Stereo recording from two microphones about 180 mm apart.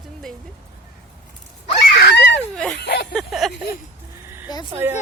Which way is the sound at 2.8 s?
70° left (ahead or behind).